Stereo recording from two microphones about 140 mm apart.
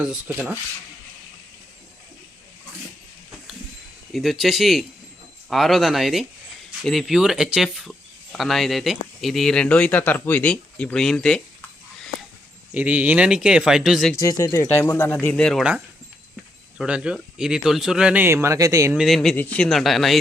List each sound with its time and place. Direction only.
0.3 s speech: 10° right (ahead or behind)
4.1 s speech: centre (ahead or behind)
12.7 s speech: 10° right (ahead or behind)
14.1 s speech: 20° left (ahead or behind); by 15.6 s 5° left (ahead or behind)
16.7 s speech: 5° right (ahead or behind); by 18.9 s 25° right (ahead or behind)
18.9 s speech: centre (ahead or behind)